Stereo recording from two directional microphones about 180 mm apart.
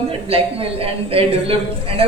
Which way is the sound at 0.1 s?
30° right (ahead or behind).